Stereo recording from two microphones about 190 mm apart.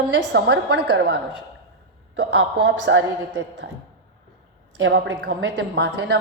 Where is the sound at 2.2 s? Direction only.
70° right (ahead or behind).